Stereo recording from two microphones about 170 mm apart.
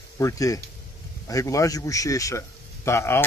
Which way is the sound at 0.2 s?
20° left (ahead or behind).